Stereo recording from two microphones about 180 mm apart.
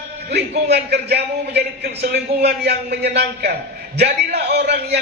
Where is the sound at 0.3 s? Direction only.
65° right (ahead or behind).